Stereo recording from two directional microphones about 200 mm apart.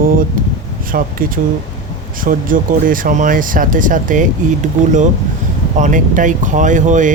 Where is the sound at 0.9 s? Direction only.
45° right (ahead or behind).